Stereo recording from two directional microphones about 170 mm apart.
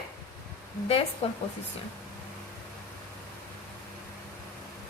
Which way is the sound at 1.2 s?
35° left (ahead or behind).